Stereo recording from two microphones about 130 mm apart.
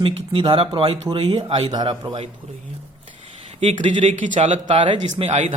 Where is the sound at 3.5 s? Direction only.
65° right (ahead or behind).